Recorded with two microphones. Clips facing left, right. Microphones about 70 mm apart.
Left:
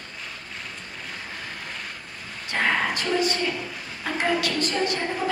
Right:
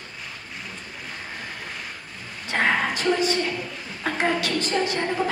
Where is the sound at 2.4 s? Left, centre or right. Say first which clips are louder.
Right 1 dB; right.